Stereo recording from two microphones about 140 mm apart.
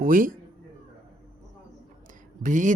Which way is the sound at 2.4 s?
65° right (ahead or behind).